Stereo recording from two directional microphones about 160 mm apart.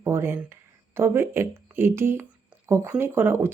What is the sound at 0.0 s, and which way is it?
Speech, 15° right (ahead or behind).